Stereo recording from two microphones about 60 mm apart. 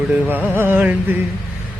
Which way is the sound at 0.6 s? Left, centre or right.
Right.